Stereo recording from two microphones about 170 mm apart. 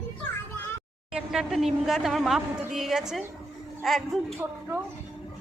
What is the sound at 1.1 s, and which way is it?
Speech, 5° right (ahead or behind).